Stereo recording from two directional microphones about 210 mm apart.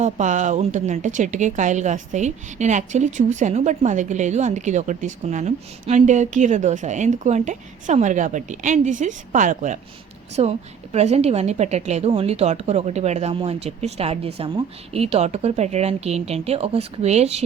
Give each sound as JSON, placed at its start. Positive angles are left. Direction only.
{"t": 0.0, "sound": "a woman's voice", "side_deg": -35}